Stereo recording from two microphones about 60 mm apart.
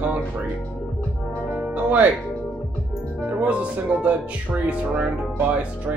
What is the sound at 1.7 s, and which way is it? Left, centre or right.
Music, right.